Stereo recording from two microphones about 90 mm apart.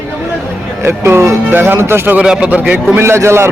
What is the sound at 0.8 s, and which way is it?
Speech, 25° right (ahead or behind).